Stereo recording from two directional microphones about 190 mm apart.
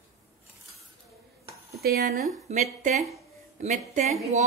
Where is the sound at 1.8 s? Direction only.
55° right (ahead or behind).